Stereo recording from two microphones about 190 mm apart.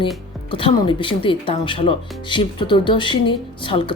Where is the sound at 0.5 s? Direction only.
25° left (ahead or behind).